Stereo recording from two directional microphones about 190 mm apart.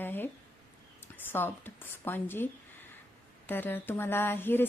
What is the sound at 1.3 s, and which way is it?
A woman's voice, 10° left (ahead or behind).